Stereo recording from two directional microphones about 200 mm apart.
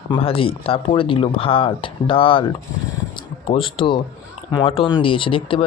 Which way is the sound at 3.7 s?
25° left (ahead or behind).